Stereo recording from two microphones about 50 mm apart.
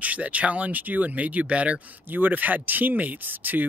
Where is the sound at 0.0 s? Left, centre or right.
Right.